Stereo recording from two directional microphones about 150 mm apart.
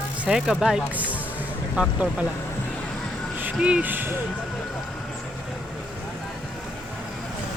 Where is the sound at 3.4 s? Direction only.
10° right (ahead or behind).